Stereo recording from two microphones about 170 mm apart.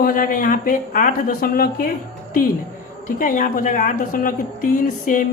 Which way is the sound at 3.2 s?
50° left (ahead or behind).